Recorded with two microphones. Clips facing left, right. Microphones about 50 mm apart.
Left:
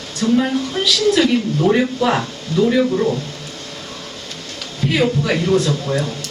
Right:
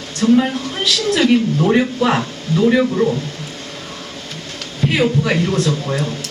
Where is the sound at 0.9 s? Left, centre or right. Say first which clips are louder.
Right 1 dB; centre.